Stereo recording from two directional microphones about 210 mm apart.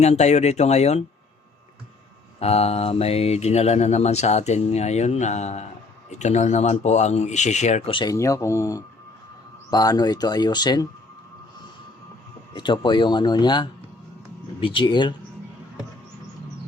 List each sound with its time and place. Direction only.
0.0 s speech: 30° left (ahead or behind)
2.4 s speech: 30° left (ahead or behind)
12.5 s speech: 20° left (ahead or behind)